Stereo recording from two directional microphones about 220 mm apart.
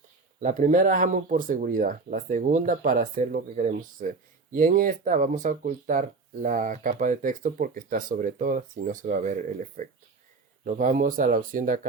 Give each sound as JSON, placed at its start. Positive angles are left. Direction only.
{"t": 0.3, "sound": "speech", "side_deg": -35}